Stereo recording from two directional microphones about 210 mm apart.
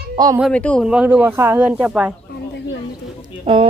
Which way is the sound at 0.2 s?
20° right (ahead or behind).